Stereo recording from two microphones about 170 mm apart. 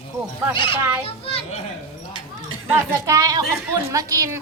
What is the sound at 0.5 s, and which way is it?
Speech, 30° left (ahead or behind).